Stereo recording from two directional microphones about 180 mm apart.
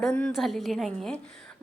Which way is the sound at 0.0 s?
5° left (ahead or behind).